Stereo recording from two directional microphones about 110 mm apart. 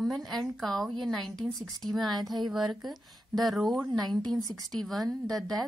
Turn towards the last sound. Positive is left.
turn(degrees=5)  # may be behind; listen again after turning